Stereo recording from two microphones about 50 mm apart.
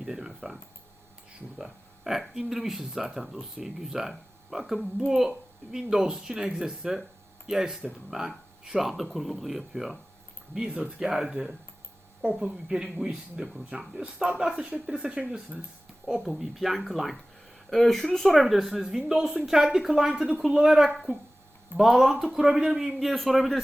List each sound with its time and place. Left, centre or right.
0.0 s a sound: centre
0.3 s a man's voice: centre
11.0 s speech: centre
16.2 s a man's voice: centre